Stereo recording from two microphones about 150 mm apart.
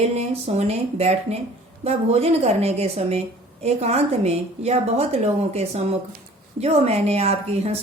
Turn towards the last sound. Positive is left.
turn(degrees=-45)  # may be behind; listen again after turning